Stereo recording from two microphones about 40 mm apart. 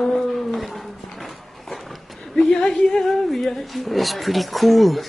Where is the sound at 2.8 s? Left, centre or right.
Centre.